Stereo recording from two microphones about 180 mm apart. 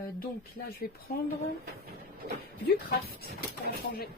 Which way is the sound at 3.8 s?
60° left (ahead or behind).